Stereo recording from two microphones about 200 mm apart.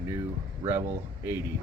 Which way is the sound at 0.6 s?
10° right (ahead or behind).